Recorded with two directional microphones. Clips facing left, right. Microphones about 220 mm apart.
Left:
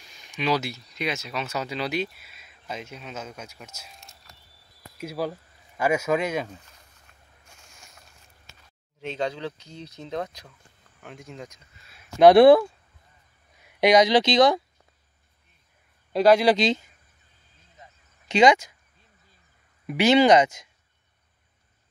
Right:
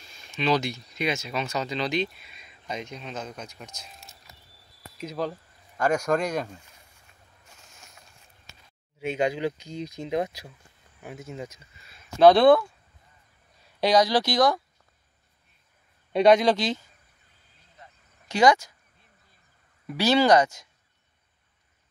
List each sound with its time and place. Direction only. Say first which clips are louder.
0.0 s speech: right 1 dB; 15° left (ahead or behind)
9.0 s speech: right 4 dB; 10° right (ahead or behind)
13.6 s speech: left 3 dB; 15° left (ahead or behind)
16.1 s speech: left 1 dB; 5° left (ahead or behind)
18.3 s speech: left 2 dB; 20° left (ahead or behind)
19.9 s speech: left 3 dB; 20° left (ahead or behind)